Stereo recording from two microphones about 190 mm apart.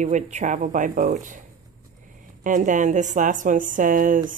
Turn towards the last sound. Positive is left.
turn(degrees=-45)  # may be behind; listen again after turning